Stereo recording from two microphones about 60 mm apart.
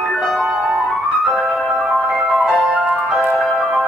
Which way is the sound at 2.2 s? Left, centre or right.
Centre.